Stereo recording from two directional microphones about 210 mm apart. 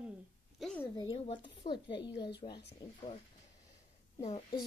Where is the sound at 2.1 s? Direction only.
50° left (ahead or behind).